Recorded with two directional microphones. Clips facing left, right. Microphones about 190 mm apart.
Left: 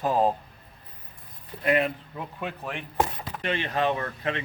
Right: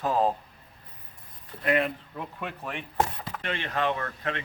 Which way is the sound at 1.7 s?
5° left (ahead or behind).